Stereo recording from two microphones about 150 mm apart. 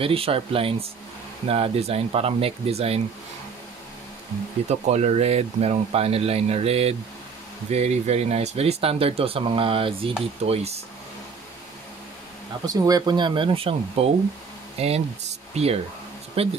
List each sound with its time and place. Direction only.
0.0 s speech: 40° right (ahead or behind)
4.6 s speech: 45° right (ahead or behind)
12.6 s speech: 25° right (ahead or behind); by 16.5 s 40° right (ahead or behind)